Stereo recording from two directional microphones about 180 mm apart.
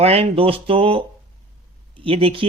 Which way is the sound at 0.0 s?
35° right (ahead or behind).